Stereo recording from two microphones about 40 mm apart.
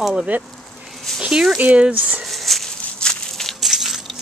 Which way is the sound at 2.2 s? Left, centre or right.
Centre.